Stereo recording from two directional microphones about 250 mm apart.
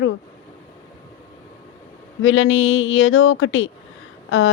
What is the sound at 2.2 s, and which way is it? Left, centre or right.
Speech, left.